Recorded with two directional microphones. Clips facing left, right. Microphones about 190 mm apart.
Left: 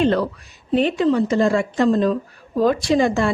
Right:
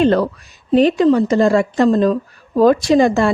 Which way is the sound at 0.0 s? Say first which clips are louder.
Right 4 dB; 45° right (ahead or behind).